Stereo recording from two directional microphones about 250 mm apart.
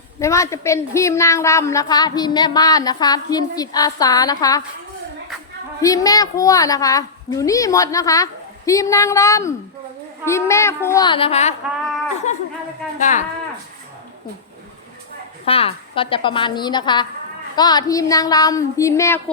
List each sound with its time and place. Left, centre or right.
0.2 s a woman's voice: centre
5.8 s a woman's voice: centre; by 13.2 s left
15.4 s a woman's voice: left